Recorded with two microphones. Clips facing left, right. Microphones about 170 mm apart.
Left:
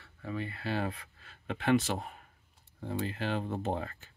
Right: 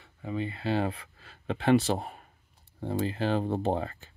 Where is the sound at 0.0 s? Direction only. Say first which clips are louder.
Right 4 dB; 15° right (ahead or behind).